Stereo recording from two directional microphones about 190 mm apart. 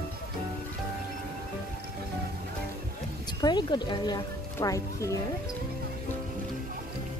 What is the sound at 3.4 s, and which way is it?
Speech, 25° left (ahead or behind).